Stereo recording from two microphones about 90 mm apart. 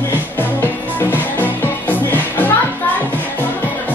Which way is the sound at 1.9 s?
20° left (ahead or behind).